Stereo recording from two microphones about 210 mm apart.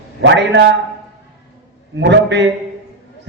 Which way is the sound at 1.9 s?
55° right (ahead or behind).